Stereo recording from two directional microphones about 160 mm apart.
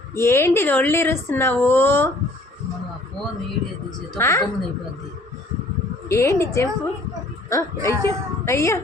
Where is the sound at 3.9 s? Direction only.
20° left (ahead or behind).